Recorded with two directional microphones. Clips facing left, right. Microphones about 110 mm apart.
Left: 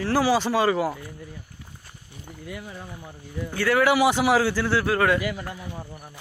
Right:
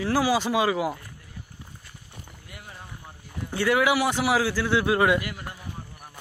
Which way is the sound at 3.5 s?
25° right (ahead or behind).